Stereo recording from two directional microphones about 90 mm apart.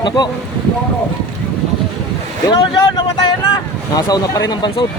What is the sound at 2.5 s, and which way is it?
Speech, 55° left (ahead or behind).